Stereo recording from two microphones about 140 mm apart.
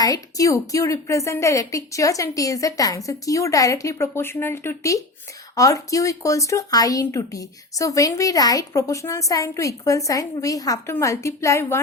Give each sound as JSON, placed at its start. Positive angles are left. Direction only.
{"t": 0.0, "sound": "speech", "side_deg": 25}